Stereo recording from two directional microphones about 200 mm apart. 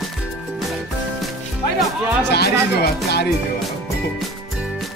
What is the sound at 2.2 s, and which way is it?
Speech, 55° left (ahead or behind).